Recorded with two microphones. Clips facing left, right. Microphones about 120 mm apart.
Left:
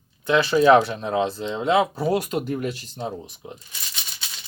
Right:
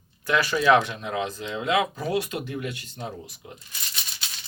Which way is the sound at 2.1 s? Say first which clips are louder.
Left 3 dB; 40° left (ahead or behind).